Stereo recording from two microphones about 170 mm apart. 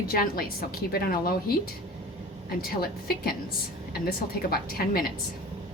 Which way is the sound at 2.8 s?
65° left (ahead or behind).